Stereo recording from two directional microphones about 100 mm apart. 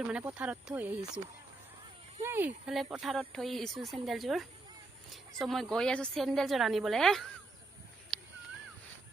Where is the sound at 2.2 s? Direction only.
25° right (ahead or behind).